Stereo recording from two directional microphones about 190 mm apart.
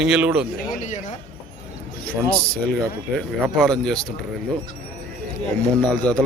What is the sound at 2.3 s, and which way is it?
Speech, 5° left (ahead or behind).